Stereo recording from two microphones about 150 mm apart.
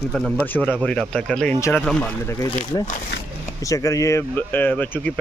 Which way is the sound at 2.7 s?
25° left (ahead or behind).